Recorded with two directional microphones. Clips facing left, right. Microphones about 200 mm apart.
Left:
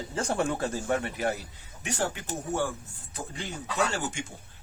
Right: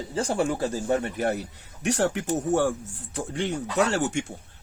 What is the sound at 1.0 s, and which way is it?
Speech, 55° right (ahead or behind).